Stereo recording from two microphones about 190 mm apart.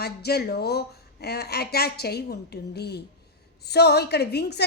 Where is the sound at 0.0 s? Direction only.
55° left (ahead or behind).